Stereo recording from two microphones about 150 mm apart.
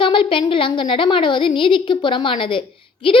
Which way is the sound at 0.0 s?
35° left (ahead or behind).